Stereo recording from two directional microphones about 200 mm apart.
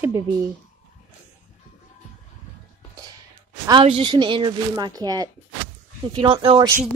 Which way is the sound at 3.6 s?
25° right (ahead or behind).